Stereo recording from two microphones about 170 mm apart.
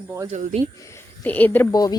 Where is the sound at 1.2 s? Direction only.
10° left (ahead or behind).